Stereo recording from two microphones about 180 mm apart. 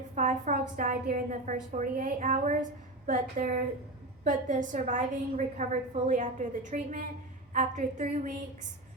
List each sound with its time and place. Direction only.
0.2 s a woman's voice: 45° right (ahead or behind)